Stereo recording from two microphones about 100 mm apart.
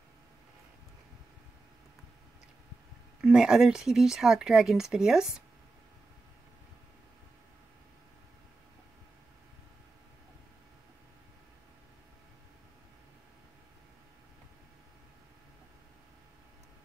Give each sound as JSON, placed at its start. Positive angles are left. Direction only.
{"t": 3.2, "sound": "speech", "side_deg": -5}